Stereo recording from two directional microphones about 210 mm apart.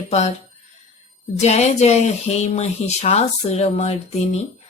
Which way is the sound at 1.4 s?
30° left (ahead or behind).